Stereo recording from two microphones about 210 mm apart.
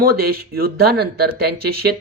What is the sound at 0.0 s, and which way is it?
Speech, 45° right (ahead or behind).